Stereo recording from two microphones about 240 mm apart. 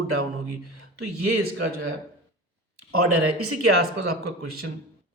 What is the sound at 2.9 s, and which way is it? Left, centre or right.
Speech, right.